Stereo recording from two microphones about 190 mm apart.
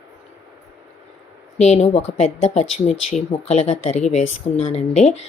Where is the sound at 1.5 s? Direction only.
35° left (ahead or behind).